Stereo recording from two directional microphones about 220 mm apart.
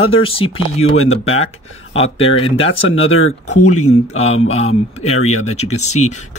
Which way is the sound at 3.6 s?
90° left.